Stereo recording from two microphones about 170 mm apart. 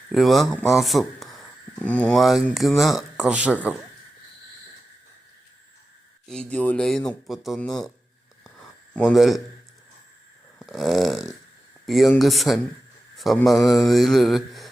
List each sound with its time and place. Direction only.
0.1 s speech: centre (ahead or behind)
6.2 s speech: 5° left (ahead or behind)
9.0 s speech: 5° left (ahead or behind)
10.6 s speech: centre (ahead or behind)